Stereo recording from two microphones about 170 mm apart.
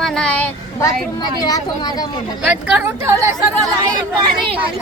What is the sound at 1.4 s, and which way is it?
Speech, 20° left (ahead or behind).